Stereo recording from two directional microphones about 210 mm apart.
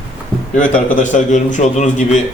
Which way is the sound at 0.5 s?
35° left (ahead or behind).